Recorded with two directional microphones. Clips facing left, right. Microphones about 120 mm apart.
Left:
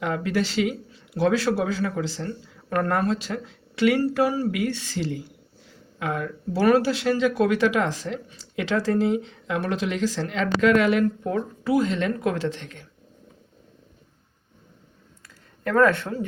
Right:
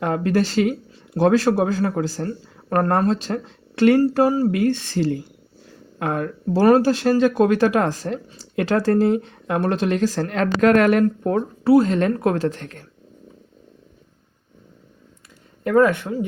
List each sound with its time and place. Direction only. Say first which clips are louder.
0.0 s speech: right 5 dB; 45° right (ahead or behind)
15.6 s speech: right 3 dB; 15° right (ahead or behind)